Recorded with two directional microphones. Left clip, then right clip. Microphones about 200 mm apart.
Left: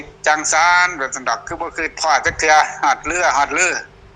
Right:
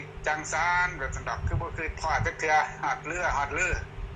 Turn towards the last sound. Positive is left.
turn(degrees=55)  # may be behind; listen again after turning